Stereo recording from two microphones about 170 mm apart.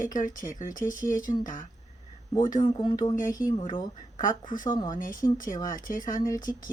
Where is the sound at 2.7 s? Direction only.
25° left (ahead or behind).